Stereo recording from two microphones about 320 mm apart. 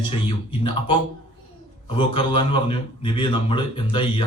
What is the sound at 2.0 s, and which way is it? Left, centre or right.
A man's voice, centre.